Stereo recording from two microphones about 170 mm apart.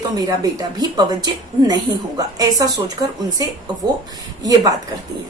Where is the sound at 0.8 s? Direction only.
25° right (ahead or behind).